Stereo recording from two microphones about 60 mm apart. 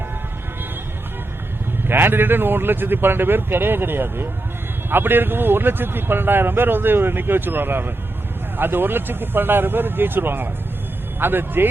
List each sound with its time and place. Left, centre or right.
1.9 s a man's voice: right